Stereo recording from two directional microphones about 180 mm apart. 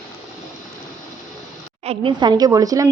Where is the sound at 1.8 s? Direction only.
30° right (ahead or behind).